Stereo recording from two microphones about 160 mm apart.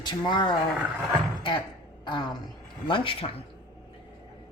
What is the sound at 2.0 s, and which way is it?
Speech, 30° left (ahead or behind).